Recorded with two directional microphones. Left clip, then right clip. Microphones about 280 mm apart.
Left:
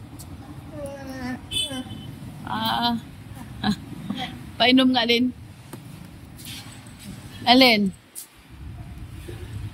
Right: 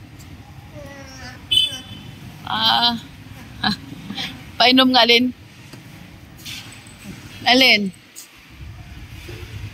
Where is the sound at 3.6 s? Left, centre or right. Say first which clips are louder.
Right 6 dB; centre.